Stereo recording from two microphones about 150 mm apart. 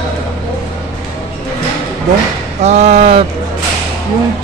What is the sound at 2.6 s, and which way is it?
Speech, 45° right (ahead or behind).